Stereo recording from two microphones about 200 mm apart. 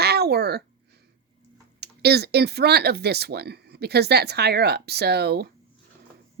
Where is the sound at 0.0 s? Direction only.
55° right (ahead or behind).